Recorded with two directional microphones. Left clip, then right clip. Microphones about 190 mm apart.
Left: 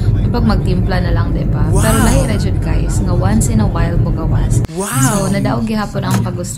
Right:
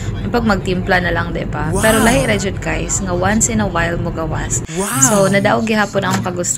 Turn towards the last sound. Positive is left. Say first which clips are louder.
# right 4 dB
turn(degrees=-20)  # may be behind; listen again after turning